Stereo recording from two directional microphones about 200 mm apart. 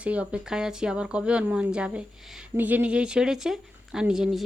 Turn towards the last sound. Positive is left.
turn(degrees=-5)  # may be behind; listen again after turning